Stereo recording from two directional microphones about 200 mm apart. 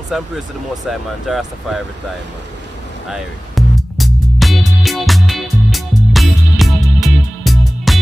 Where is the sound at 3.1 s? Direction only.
Centre (ahead or behind).